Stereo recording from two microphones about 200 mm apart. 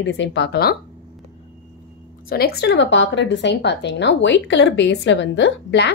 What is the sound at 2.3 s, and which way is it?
Speech, 50° left (ahead or behind).